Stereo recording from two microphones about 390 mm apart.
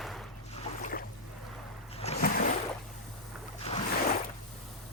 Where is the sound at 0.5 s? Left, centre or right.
Centre.